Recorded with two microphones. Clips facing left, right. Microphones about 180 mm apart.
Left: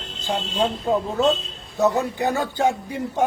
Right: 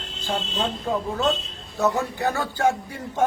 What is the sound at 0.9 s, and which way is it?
Speech, 20° left (ahead or behind).